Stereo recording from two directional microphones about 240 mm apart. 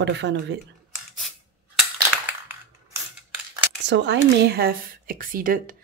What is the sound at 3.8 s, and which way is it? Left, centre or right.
A woman's voice, right.